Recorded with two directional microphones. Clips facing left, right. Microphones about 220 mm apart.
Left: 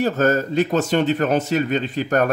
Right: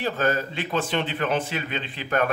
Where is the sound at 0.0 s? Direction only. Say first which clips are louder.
Left 6 dB; 45° left (ahead or behind).